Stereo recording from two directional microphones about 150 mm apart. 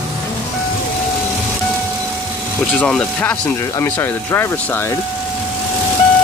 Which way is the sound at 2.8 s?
5° left (ahead or behind).